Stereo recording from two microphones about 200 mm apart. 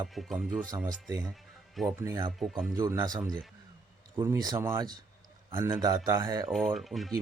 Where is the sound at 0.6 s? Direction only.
20° right (ahead or behind).